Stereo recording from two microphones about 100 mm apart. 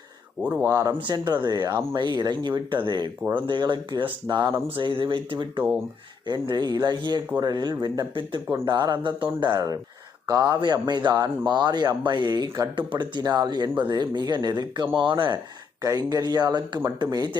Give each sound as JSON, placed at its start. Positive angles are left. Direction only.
{"t": 0.6, "sound": "speech", "side_deg": -30}
{"t": 0.9, "sound": "speech", "side_deg": -50}
{"t": 4.8, "sound": "speech", "side_deg": -55}
{"t": 15.8, "sound": "speech", "side_deg": -40}